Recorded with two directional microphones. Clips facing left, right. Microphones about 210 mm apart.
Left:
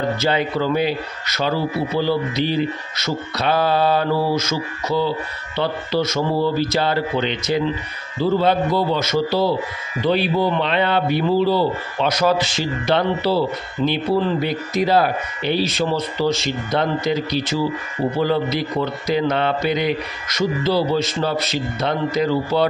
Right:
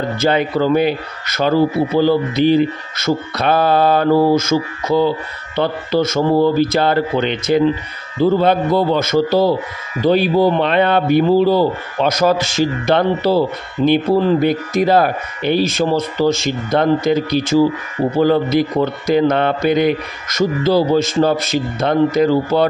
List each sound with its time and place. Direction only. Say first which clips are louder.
0.2 s a man's voice: right 9 dB; 50° right (ahead or behind)